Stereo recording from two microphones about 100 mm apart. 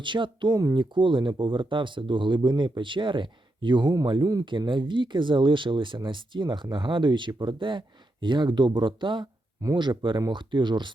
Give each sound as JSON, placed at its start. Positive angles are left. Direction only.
{"t": 0.0, "sound": "speech", "side_deg": -55}
{"t": 0.9, "sound": "speech", "side_deg": -55}